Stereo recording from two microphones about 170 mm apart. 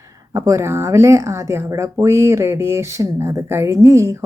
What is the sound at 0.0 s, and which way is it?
Speech, 20° right (ahead or behind).